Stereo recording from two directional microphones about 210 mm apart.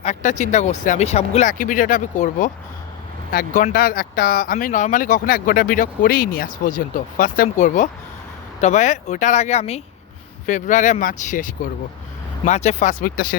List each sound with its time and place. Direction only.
0.0 s speech: 35° left (ahead or behind)